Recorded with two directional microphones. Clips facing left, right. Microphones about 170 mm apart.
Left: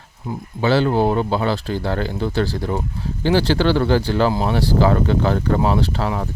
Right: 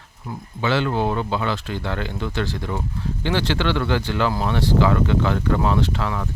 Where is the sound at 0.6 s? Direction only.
35° left (ahead or behind).